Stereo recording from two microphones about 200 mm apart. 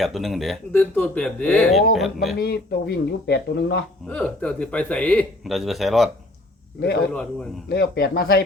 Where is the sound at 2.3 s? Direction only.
50° left (ahead or behind).